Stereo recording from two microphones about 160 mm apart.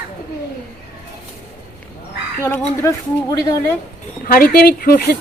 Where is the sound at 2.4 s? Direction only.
15° left (ahead or behind).